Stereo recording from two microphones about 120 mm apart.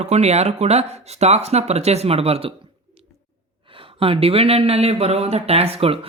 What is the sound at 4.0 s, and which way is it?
Speech, 50° right (ahead or behind).